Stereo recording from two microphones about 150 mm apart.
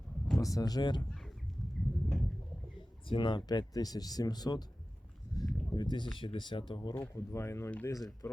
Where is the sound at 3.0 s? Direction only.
30° left (ahead or behind).